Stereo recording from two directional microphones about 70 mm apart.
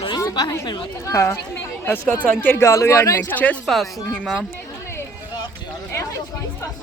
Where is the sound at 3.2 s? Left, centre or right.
Left.